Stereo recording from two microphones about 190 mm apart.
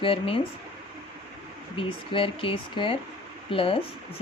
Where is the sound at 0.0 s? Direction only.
30° left (ahead or behind).